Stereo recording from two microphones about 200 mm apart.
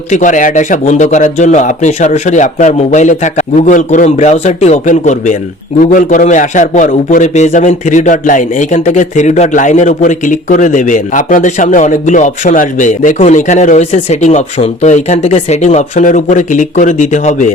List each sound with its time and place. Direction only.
0.1 s a man's voice: 40° left (ahead or behind)